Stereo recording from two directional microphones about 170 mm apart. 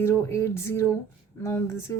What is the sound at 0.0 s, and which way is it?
A woman's voice, 15° left (ahead or behind).